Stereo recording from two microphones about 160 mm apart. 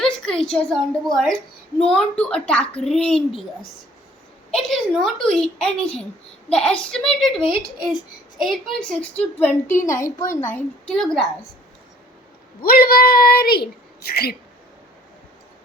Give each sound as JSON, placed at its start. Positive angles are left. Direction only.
{"t": 0.0, "sound": "a woman's voice", "side_deg": 5}
{"t": 4.5, "sound": "a child's voice", "side_deg": 0}
{"t": 12.6, "sound": "speech", "side_deg": 70}